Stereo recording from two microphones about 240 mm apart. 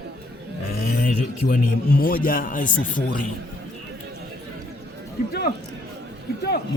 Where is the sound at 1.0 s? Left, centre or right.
Left.